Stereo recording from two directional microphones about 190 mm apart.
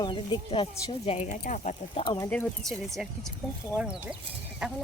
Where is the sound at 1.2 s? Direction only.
45° left (ahead or behind); by 2.3 s 25° left (ahead or behind).